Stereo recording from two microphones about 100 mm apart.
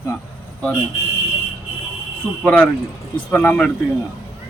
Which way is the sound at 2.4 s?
15° left (ahead or behind).